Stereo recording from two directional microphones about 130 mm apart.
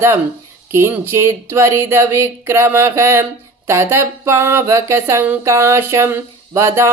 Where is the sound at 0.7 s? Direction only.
20° right (ahead or behind).